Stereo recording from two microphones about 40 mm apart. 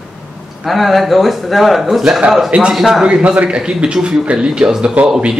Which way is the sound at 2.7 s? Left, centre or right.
Centre.